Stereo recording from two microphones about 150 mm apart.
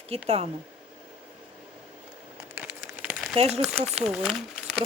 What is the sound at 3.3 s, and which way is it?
Speech, 45° right (ahead or behind).